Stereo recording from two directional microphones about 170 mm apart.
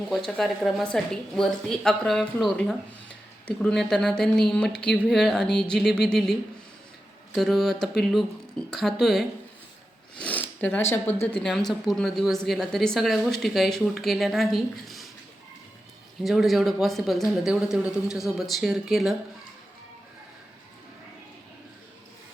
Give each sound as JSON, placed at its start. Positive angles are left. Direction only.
{"t": 0.3, "sound": "speech", "side_deg": 0}
{"t": 7.3, "sound": "speech", "side_deg": 0}
{"t": 11.3, "sound": "speech", "side_deg": 5}
{"t": 16.2, "sound": "speech", "side_deg": 0}